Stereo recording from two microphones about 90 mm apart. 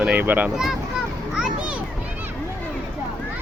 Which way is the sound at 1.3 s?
10° right (ahead or behind).